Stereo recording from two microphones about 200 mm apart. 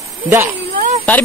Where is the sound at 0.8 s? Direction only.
40° right (ahead or behind).